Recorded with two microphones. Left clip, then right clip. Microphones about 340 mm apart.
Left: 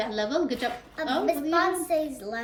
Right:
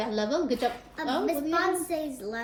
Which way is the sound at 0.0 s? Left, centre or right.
Centre.